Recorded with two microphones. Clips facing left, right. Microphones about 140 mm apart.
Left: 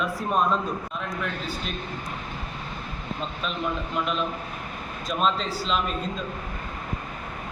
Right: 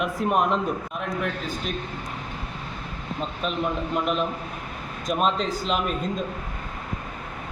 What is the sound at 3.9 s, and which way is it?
A man's voice, 50° right (ahead or behind).